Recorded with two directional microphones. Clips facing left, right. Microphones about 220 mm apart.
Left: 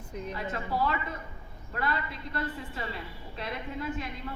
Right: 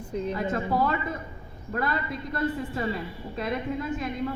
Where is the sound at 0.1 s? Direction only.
30° right (ahead or behind).